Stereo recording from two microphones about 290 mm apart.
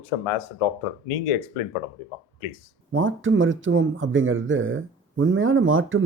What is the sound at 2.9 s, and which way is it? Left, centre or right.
Speech, right.